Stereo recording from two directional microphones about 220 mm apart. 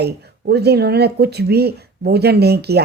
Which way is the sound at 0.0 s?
45° right (ahead or behind).